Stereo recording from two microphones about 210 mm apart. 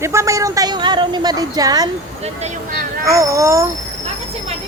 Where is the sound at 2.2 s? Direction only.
35° right (ahead or behind).